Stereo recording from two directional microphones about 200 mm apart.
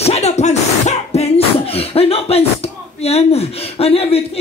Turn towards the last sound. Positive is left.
turn(degrees=30)  # may be behind; listen again after turning